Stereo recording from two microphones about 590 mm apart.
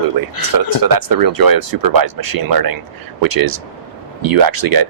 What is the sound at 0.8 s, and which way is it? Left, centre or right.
Speech, right.